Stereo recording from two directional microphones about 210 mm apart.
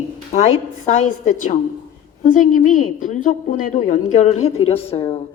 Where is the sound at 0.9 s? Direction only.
35° left (ahead or behind).